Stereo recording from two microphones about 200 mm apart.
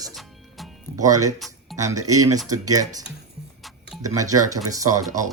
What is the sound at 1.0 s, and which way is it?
Speech, 15° right (ahead or behind).